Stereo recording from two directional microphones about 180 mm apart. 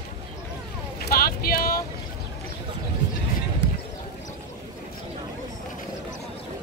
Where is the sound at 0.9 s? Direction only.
55° left (ahead or behind).